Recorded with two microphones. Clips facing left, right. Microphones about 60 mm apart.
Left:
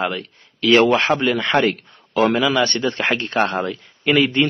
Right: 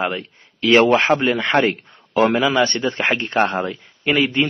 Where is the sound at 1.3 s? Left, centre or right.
Centre.